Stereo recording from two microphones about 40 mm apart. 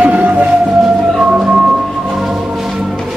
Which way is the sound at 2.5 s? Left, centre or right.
Centre.